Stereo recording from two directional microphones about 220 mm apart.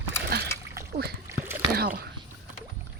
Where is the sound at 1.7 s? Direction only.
45° right (ahead or behind).